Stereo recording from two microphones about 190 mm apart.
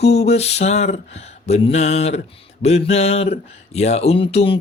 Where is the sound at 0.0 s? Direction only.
35° left (ahead or behind).